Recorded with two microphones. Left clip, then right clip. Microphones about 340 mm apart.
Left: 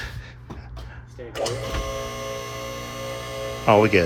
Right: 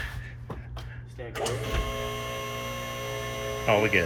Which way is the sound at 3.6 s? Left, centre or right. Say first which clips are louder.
Left 7 dB; centre.